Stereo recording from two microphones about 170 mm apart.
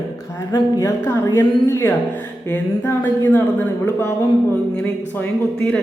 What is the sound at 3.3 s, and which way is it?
Speech, 10° left (ahead or behind).